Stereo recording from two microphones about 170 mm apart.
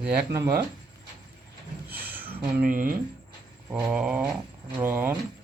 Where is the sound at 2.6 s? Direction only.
55° right (ahead or behind).